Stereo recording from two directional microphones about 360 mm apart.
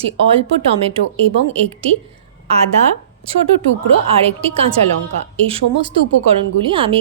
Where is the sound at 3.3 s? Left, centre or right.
Centre.